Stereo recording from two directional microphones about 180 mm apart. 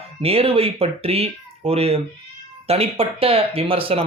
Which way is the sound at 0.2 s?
30° right (ahead or behind).